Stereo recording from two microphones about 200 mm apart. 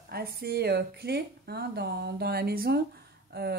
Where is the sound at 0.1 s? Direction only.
50° right (ahead or behind).